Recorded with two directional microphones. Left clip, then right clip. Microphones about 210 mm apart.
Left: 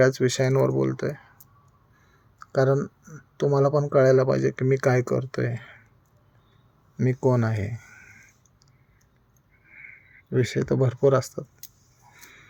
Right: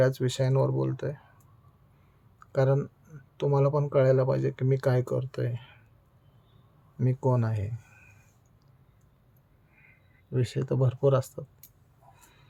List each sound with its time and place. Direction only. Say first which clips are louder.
0.0 s speech: left 5 dB; 25° left (ahead or behind)
2.4 s speech: left 4 dB; 25° left (ahead or behind)
6.9 s speech: left 5 dB; 25° left (ahead or behind)
10.3 s speech: left 7 dB; 25° left (ahead or behind)